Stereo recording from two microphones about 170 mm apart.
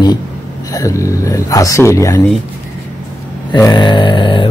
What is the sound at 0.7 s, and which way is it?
Speech, 20° left (ahead or behind).